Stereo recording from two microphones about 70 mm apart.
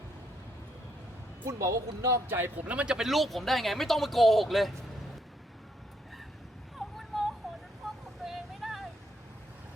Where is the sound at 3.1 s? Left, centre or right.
Centre.